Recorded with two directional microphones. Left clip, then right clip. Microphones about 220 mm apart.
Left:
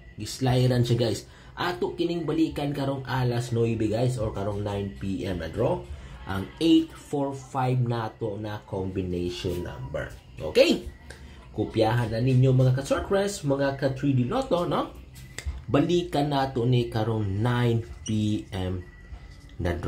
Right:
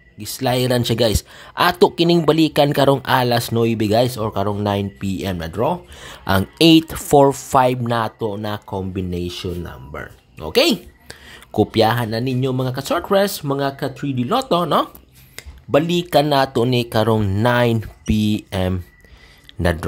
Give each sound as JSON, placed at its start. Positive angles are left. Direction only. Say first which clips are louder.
{"t": 0.2, "sound": "speech", "louder": "right 7 dB", "side_deg": -30}
{"t": 6.2, "sound": "speech", "louder": "right 11 dB", "side_deg": -40}
{"t": 10.5, "sound": "speech", "louder": "right 4 dB", "side_deg": -55}
{"t": 15.7, "sound": "speech", "louder": "right 8 dB", "side_deg": -30}